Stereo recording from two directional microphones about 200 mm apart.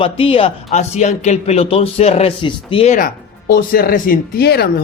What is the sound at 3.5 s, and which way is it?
Speech, 45° left (ahead or behind).